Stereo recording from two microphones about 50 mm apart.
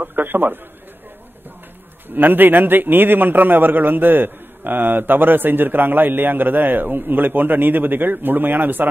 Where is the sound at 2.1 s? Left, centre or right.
Right.